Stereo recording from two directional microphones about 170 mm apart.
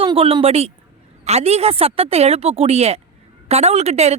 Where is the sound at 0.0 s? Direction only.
30° right (ahead or behind).